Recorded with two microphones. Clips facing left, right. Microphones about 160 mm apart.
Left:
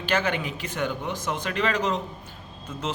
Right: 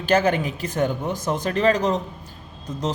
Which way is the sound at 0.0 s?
40° right (ahead or behind).